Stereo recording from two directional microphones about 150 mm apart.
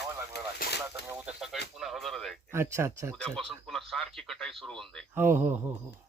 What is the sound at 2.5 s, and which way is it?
Speech, 20° right (ahead or behind).